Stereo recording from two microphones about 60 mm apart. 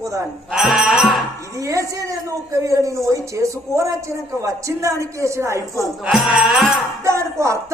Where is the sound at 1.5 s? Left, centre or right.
Right.